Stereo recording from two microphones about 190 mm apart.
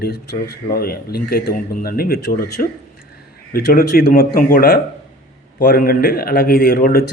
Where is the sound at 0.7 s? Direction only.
50° left (ahead or behind).